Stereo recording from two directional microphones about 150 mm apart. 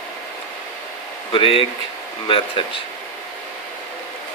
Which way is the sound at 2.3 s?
35° left (ahead or behind).